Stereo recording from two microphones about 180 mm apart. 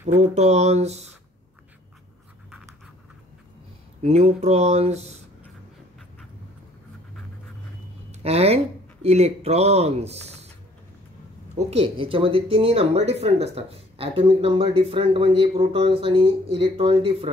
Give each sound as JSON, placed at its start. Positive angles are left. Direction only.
{"t": 0.2, "sound": "speech", "side_deg": -40}
{"t": 4.0, "sound": "speech", "side_deg": -35}
{"t": 8.1, "sound": "speech", "side_deg": -35}
{"t": 11.7, "sound": "speech", "side_deg": -35}